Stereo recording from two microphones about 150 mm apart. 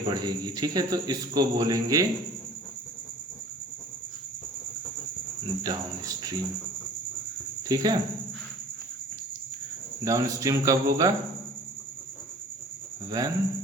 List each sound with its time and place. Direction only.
0.1 s a man's voice: 25° right (ahead or behind)
5.6 s a man's voice: 25° right (ahead or behind)
7.7 s a man's voice: 25° right (ahead or behind)
10.0 s a man's voice: 20° right (ahead or behind)
13.1 s a man's voice: 25° right (ahead or behind)